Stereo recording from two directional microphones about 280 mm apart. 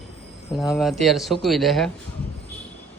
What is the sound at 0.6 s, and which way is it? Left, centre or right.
Speech, centre.